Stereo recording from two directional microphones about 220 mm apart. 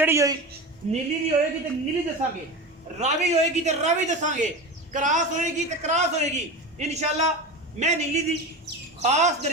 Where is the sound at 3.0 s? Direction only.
30° right (ahead or behind).